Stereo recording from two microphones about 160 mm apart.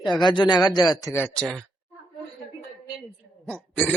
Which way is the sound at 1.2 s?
5° left (ahead or behind).